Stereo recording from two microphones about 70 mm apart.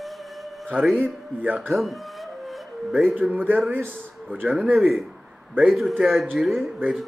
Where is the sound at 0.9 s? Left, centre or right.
Right.